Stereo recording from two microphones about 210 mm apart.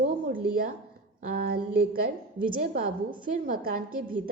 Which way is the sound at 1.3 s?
45° right (ahead or behind).